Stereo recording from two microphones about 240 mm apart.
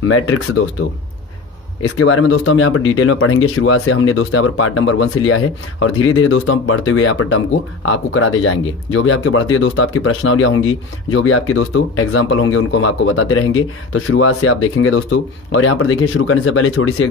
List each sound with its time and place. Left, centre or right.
0.1 s speech: left